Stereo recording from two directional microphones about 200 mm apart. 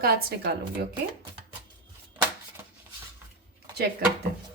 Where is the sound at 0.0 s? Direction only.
50° right (ahead or behind).